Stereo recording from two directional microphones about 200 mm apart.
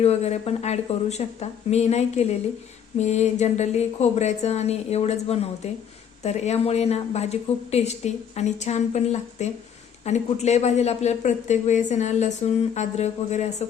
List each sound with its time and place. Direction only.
0.0 s speech: 30° left (ahead or behind)